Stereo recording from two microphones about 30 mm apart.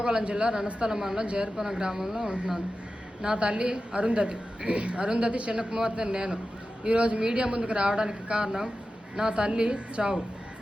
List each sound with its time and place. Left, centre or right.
0.0 s a man's voice: right
1.2 s a woman's voice: right
1.5 s speech: centre
3.3 s a woman's voice: right
5.0 s a man's voice: right
5.7 s a man's voice: right
7.2 s a woman's voice: right